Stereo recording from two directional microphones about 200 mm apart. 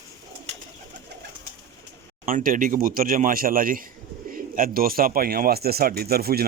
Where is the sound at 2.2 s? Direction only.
45° right (ahead or behind).